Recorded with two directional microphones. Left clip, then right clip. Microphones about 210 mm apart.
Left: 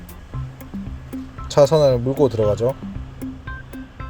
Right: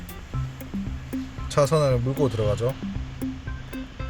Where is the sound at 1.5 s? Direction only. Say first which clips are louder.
Left 7 dB; 15° left (ahead or behind).